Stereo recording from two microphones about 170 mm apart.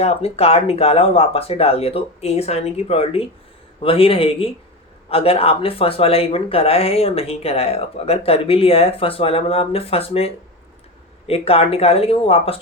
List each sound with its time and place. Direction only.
0.0 s speech: 35° left (ahead or behind)